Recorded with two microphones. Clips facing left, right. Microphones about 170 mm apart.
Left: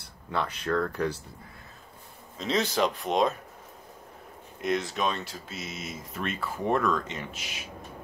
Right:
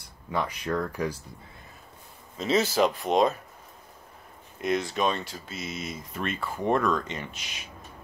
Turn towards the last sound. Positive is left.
turn(degrees=5)  # may be behind; listen again after turning